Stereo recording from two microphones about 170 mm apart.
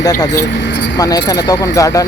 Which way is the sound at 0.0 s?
20° left (ahead or behind).